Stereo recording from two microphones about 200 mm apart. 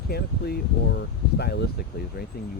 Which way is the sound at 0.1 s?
50° left (ahead or behind).